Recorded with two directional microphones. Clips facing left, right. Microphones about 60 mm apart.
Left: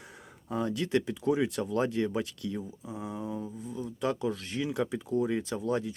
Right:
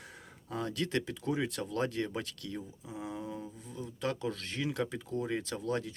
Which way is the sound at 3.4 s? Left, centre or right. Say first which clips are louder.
Left 6 dB; centre.